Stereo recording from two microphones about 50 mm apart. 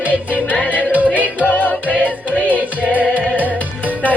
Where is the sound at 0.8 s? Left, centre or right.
Right.